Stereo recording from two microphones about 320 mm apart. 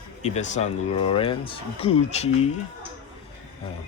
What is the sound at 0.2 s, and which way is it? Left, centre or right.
Speech, left.